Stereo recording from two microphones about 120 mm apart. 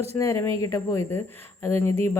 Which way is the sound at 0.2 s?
25° left (ahead or behind).